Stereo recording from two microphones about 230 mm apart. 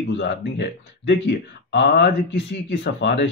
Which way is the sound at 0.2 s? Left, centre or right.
Left.